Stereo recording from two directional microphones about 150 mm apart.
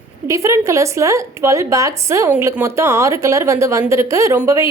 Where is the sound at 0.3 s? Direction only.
20° right (ahead or behind).